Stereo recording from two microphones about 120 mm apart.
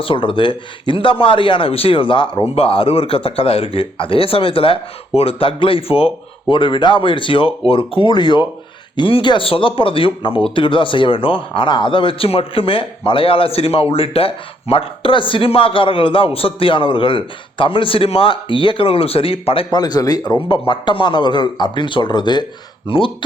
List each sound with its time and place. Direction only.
0.0 s speech: 45° left (ahead or behind)
19.7 s a man's voice: 35° left (ahead or behind)